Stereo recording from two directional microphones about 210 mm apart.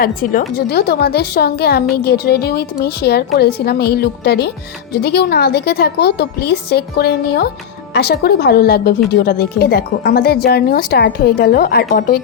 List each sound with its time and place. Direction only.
0.0 s speech: 40° left (ahead or behind)